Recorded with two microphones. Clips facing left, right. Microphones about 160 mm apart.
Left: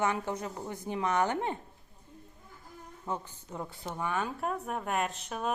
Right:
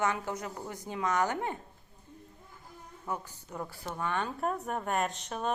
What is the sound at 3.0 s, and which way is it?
Speech, 20° left (ahead or behind).